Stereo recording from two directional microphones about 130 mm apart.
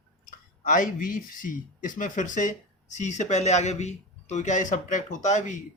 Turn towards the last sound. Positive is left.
turn(degrees=70)  # may be behind; listen again after turning